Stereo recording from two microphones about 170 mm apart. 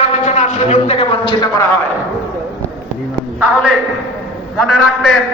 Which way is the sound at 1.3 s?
20° left (ahead or behind).